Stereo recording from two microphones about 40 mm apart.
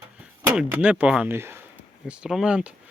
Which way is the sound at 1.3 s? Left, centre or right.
Right.